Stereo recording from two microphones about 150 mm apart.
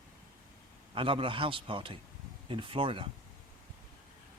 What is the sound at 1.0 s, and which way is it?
A man's voice, 35° right (ahead or behind).